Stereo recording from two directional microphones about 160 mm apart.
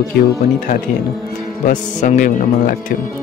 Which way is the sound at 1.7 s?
50° left (ahead or behind).